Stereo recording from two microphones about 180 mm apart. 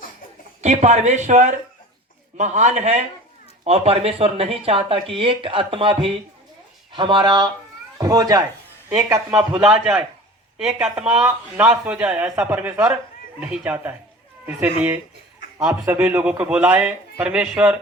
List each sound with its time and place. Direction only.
0.6 s a man's voice: 40° right (ahead or behind); by 9.2 s 15° right (ahead or behind)
9.6 s a man's voice: 5° right (ahead or behind)